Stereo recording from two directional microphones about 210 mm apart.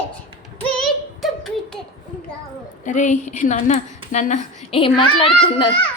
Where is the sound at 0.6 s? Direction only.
5° left (ahead or behind).